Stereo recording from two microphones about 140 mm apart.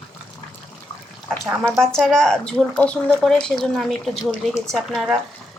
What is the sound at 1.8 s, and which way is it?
Speech, 5° left (ahead or behind).